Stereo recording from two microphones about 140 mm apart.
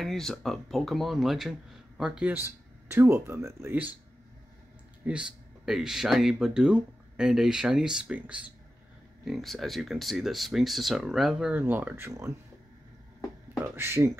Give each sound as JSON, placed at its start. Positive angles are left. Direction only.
{"t": 0.0, "sound": "speech", "side_deg": 0}
{"t": 5.0, "sound": "speech", "side_deg": -10}
{"t": 13.7, "sound": "speech", "side_deg": -20}